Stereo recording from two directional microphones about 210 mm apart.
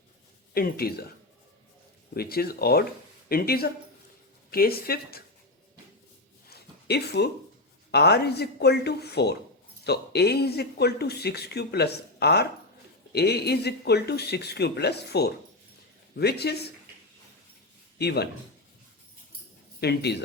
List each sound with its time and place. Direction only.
0.5 s speech: 45° left (ahead or behind)
2.1 s speech: 45° left (ahead or behind)
6.5 s a sound: 50° left (ahead or behind)
7.9 s speech: 50° left (ahead or behind)
17.9 s speech: 50° left (ahead or behind)
19.8 s speech: 50° left (ahead or behind)